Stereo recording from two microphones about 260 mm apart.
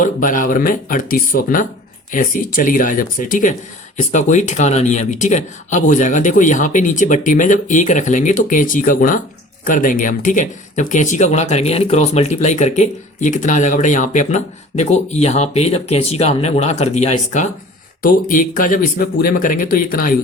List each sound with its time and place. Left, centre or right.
0.0 s speech: left